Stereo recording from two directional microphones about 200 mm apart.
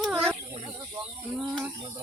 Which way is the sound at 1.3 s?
10° right (ahead or behind).